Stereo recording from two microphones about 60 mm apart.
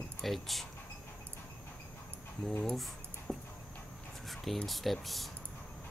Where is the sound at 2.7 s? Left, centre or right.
Centre.